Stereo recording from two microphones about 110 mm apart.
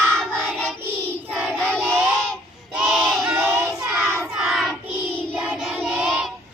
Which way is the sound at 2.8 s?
Centre (ahead or behind).